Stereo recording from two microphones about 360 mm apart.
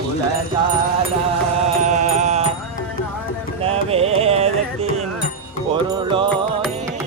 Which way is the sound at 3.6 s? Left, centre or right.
Centre.